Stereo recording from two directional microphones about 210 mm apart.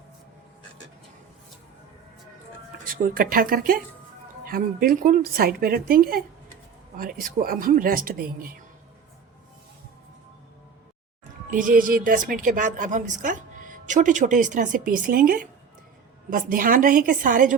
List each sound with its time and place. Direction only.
2.9 s a woman's voice: 40° right (ahead or behind)
11.5 s a woman's voice: 40° right (ahead or behind)